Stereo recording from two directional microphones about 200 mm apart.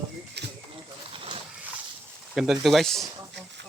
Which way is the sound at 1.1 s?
25° right (ahead or behind).